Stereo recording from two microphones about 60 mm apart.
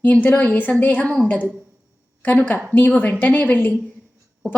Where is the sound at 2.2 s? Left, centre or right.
Left.